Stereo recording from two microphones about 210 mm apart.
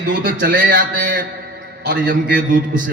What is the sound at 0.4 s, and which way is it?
A man's voice, 45° right (ahead or behind).